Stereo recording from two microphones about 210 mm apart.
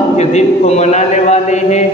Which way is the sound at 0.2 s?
30° left (ahead or behind).